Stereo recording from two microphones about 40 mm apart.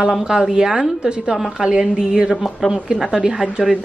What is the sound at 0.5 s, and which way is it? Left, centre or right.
A woman's voice, centre.